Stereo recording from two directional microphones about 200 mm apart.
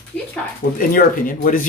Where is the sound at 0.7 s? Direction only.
40° left (ahead or behind).